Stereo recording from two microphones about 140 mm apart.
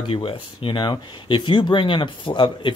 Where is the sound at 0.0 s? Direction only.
40° left (ahead or behind).